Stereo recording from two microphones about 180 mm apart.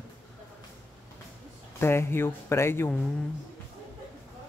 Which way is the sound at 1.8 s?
15° left (ahead or behind).